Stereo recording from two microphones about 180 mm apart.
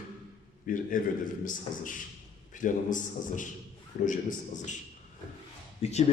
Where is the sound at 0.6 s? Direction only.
50° left (ahead or behind).